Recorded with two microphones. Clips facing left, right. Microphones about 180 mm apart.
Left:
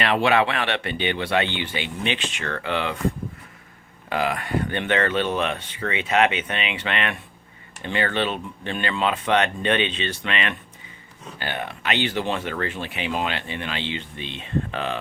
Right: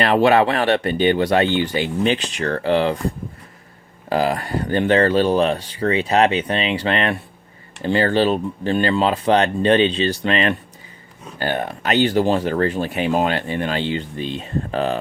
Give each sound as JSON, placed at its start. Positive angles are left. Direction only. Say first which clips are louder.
{"t": 0.0, "sound": "speech", "louder": "right 5 dB", "side_deg": -40}
{"t": 4.1, "sound": "speech", "louder": "right 4 dB", "side_deg": -35}